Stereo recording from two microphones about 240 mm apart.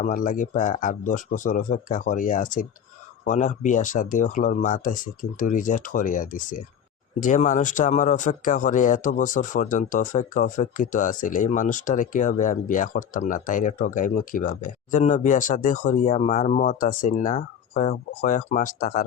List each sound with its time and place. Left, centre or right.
0.0 s speech: left